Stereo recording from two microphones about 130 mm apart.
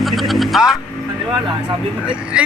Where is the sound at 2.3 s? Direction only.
10° right (ahead or behind).